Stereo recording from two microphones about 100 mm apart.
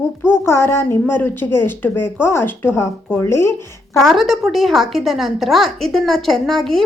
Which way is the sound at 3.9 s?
Centre (ahead or behind).